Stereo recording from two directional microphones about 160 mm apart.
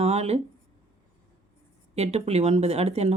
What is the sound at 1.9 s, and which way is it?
Speech, 40° right (ahead or behind).